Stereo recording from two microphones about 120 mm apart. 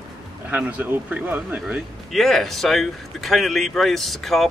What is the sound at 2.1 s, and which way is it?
Speech, centre (ahead or behind).